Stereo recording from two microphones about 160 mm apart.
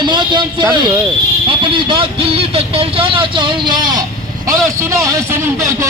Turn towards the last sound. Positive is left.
turn(degrees=-15)  # may be behind; listen again after turning